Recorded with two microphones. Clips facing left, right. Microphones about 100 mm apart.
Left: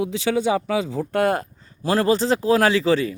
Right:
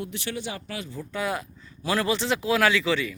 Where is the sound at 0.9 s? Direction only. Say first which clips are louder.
Left 6 dB; 60° left (ahead or behind).